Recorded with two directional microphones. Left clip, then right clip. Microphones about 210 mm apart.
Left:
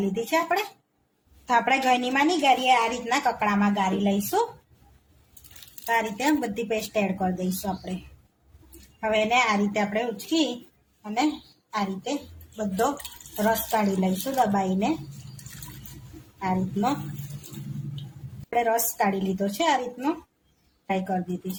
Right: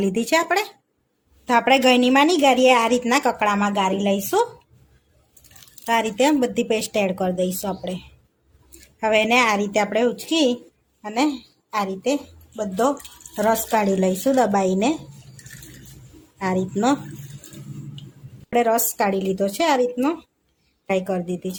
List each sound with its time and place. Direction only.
0.1 s a woman's voice: 50° right (ahead or behind)
5.8 s a woman's voice: 50° right (ahead or behind)
9.0 s a woman's voice: 45° right (ahead or behind)
13.3 s a woman's voice: 55° right (ahead or behind)
16.4 s a woman's voice: 50° right (ahead or behind)
18.5 s a woman's voice: 50° right (ahead or behind)